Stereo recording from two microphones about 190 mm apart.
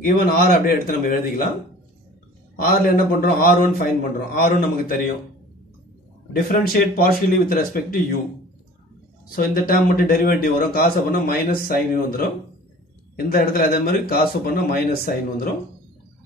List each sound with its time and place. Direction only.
0.0 s a man's voice: 50° left (ahead or behind)
2.5 s a man's voice: 50° left (ahead or behind)
6.3 s a man's voice: 50° left (ahead or behind)
9.3 s a man's voice: 50° left (ahead or behind)